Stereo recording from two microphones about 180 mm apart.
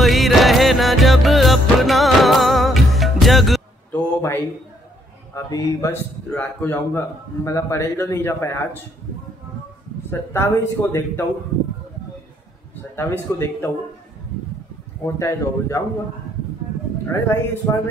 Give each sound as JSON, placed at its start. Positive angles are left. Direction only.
{"t": 0.0, "sound": "music", "side_deg": 0}
{"t": 5.3, "sound": "a man's voice", "side_deg": 15}
{"t": 10.0, "sound": "a man's voice", "side_deg": 10}
{"t": 12.9, "sound": "a man's voice", "side_deg": 10}
{"t": 15.1, "sound": "a man's voice", "side_deg": 15}
{"t": 17.1, "sound": "a man's voice", "side_deg": 15}